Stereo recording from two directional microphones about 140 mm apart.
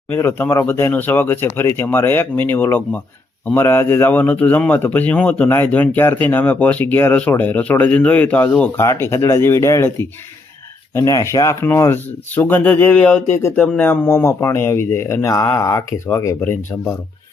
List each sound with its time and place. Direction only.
0.1 s a man's voice: 15° left (ahead or behind)